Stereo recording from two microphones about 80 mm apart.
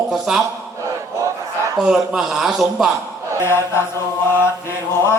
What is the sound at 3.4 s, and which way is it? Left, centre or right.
Mantra, left.